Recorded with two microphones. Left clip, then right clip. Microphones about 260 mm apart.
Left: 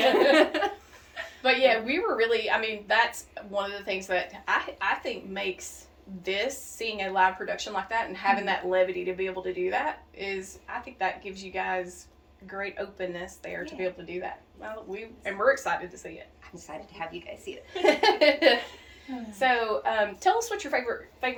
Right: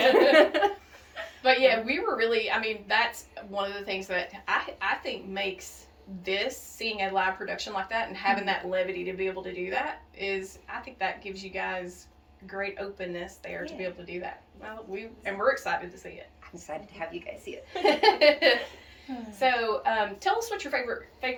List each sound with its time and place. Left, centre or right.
0.3 s a sound: centre
1.4 s a woman's voice: centre
17.0 s a woman's voice: centre
17.8 s a woman's voice: centre